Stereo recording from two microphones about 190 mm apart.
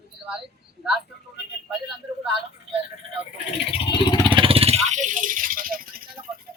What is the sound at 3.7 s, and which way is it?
Vehicle, 30° left (ahead or behind).